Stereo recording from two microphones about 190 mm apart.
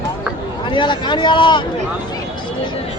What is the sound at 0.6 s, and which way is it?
A man's voice, 25° left (ahead or behind).